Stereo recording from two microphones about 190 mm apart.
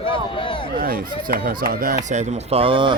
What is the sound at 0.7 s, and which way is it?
Speech, 50° right (ahead or behind).